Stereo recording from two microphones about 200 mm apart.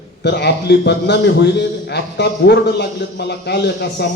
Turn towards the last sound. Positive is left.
turn(degrees=55)  # may be behind; listen again after turning